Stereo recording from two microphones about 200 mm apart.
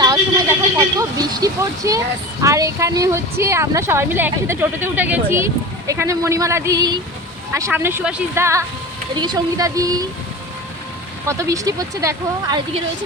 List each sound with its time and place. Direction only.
0.0 s vehicle: 20° right (ahead or behind)
0.9 s speech: 20° right (ahead or behind)
11.3 s speech: 15° right (ahead or behind)